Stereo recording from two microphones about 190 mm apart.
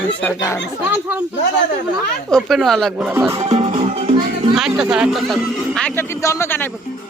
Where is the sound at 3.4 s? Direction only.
30° right (ahead or behind).